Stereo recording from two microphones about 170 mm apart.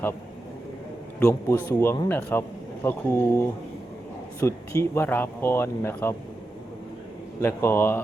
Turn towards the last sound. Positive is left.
turn(degrees=15)  # may be behind; listen again after turning